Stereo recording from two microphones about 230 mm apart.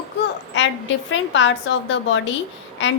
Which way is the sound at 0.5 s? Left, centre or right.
Left.